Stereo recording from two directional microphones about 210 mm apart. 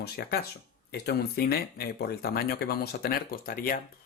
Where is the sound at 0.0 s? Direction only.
50° left (ahead or behind).